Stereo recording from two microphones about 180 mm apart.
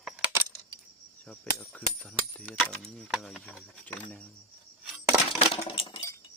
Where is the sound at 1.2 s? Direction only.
5° left (ahead or behind).